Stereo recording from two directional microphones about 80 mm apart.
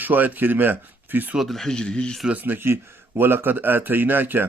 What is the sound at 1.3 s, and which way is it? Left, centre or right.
Speech, centre.